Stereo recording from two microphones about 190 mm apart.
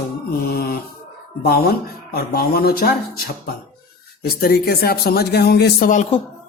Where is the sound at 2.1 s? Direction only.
55° left (ahead or behind).